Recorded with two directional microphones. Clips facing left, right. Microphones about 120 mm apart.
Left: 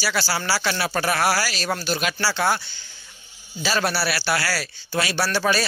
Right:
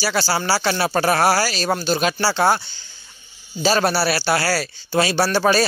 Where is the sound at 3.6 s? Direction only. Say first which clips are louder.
Right 5 dB; 35° right (ahead or behind).